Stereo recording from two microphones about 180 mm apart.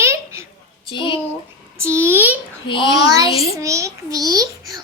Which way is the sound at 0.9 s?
25° left (ahead or behind).